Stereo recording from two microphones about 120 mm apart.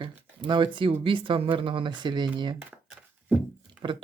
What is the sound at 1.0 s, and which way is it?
Speech, 45° right (ahead or behind).